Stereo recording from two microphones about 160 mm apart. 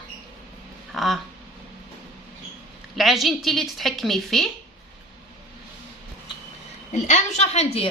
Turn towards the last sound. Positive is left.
turn(degrees=45)  # may be behind; listen again after turning